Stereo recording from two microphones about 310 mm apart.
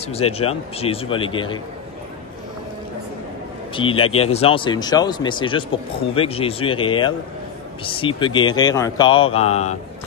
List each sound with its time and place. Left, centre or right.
0.0 s speech: centre
3.7 s speech: centre